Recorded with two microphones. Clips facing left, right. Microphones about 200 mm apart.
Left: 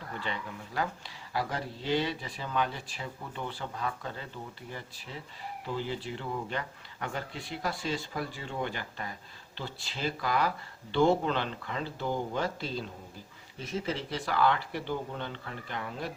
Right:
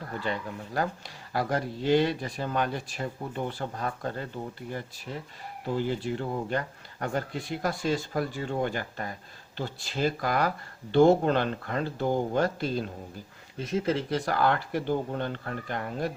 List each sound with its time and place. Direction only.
0.2 s speech: 45° right (ahead or behind)